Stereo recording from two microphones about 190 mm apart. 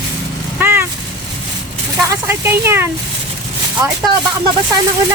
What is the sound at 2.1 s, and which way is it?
Speech, 15° right (ahead or behind).